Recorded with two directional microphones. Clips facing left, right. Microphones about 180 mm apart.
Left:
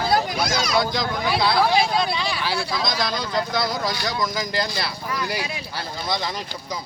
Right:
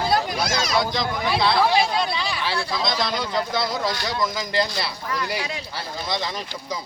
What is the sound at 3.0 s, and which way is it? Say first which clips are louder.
Speech: even; centre (ahead or behind).